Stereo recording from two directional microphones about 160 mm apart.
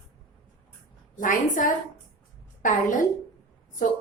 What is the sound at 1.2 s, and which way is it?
A woman's voice, 55° left (ahead or behind).